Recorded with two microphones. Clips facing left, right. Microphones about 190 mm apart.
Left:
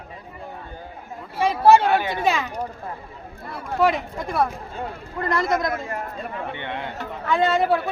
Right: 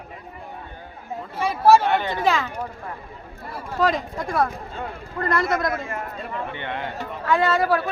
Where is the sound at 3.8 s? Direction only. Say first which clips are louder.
Left 1 dB; 10° left (ahead or behind).